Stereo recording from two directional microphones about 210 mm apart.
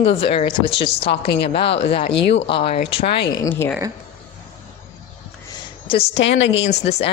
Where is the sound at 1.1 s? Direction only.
55° left (ahead or behind).